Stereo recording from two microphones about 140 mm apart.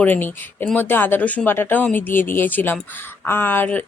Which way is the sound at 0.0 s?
15° left (ahead or behind).